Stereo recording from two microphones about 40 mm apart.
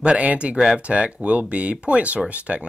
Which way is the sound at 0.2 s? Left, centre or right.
Right.